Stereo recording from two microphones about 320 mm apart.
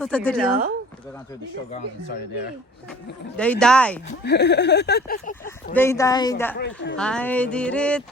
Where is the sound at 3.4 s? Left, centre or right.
Centre.